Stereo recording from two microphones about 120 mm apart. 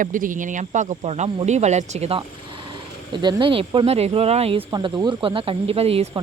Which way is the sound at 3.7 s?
55° right (ahead or behind).